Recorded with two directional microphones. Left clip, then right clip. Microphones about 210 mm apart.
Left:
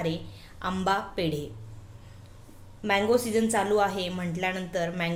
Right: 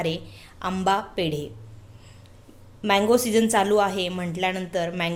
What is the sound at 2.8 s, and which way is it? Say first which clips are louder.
A woman's voice: right 4 dB; 20° right (ahead or behind).